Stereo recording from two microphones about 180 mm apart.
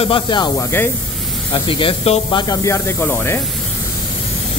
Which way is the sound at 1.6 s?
30° left (ahead or behind).